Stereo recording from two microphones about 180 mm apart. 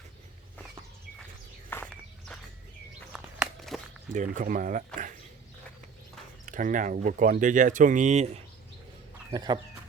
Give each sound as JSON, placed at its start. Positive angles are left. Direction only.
{"t": 1.7, "sound": "walk", "side_deg": 5}
{"t": 3.2, "sound": "a sound", "side_deg": -5}
{"t": 4.1, "sound": "speech", "side_deg": -45}
{"t": 6.4, "sound": "speech", "side_deg": -45}
{"t": 9.3, "sound": "speech", "side_deg": -20}